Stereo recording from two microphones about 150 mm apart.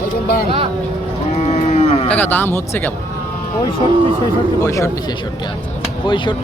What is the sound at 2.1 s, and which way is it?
Speech, 10° left (ahead or behind).